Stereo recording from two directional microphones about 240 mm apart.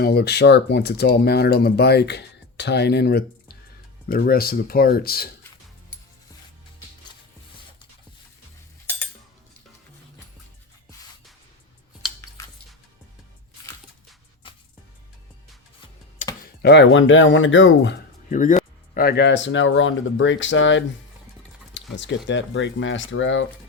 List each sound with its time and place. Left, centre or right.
0.0 s speech: left
14.4 s music: left
16.2 s tick-tock: left
16.6 s speech: left
18.3 s speech: left
21.7 s a sound: left
22.3 s speech: left